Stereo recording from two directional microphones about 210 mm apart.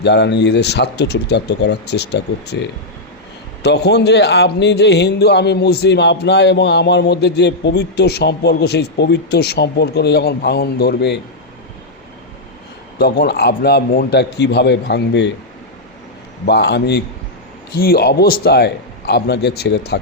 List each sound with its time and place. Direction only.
0.0 s a man's voice: 55° left (ahead or behind)
13.0 s a man's voice: 50° left (ahead or behind)
16.5 s a man's voice: 55° left (ahead or behind)